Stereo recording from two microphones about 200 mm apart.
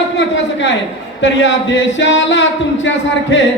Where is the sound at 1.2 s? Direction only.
65° left (ahead or behind).